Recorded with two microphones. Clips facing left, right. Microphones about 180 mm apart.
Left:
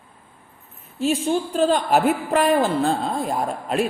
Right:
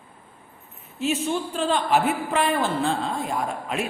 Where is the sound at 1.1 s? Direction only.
40° left (ahead or behind).